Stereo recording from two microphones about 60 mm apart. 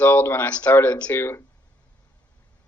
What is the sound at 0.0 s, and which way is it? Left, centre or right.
Speech, left.